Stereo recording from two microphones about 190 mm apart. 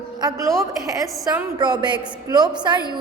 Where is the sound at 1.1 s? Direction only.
Centre (ahead or behind).